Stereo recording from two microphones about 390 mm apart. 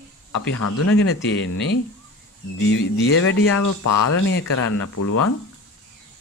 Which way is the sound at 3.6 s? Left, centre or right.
Left.